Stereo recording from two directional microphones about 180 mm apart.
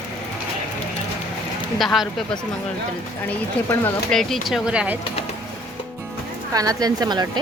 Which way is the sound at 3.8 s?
5° left (ahead or behind).